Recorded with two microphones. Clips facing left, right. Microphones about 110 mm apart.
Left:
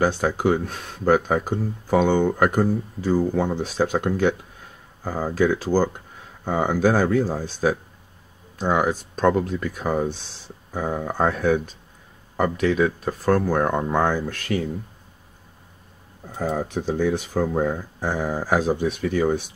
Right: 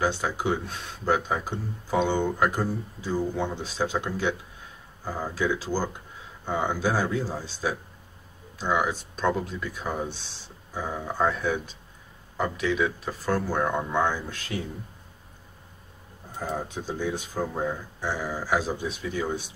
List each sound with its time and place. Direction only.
0.0 s speech: 45° left (ahead or behind)
11.1 s speech: 50° left (ahead or behind)
16.3 s speech: 65° left (ahead or behind)